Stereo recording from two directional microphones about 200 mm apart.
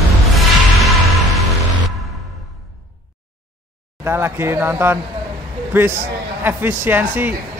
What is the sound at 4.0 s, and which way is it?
A man's voice, 10° right (ahead or behind).